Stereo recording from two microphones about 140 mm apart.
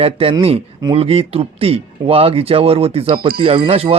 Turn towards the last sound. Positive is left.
turn(degrees=-45)  # may be behind; listen again after turning